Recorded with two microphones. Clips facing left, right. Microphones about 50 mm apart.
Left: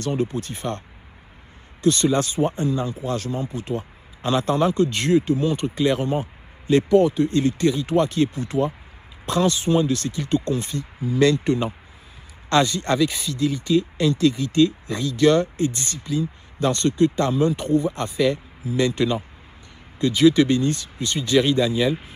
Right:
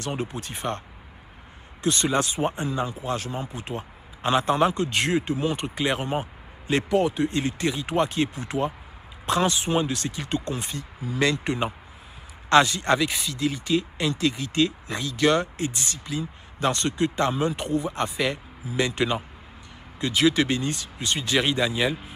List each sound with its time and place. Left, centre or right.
0.0 s speech: right